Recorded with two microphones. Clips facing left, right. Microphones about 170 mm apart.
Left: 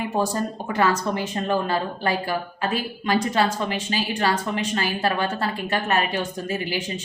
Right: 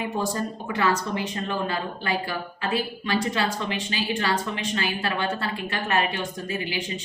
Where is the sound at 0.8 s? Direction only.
40° left (ahead or behind).